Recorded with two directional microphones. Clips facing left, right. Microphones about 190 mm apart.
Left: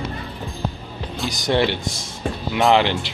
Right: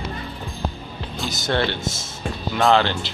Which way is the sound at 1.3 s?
15° left (ahead or behind).